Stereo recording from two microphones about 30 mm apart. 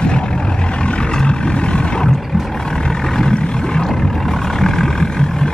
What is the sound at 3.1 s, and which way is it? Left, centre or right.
Vehicle, left.